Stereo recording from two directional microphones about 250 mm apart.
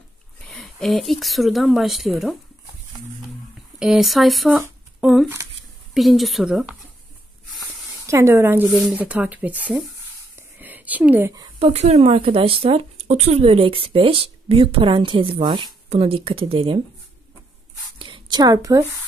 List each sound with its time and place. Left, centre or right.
0.5 s speech: centre
3.8 s speech: centre
8.1 s speech: centre
11.6 s a woman's voice: right
17.9 s a sound: centre